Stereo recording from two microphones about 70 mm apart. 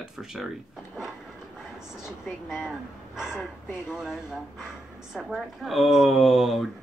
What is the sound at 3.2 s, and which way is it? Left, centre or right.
Speech, left.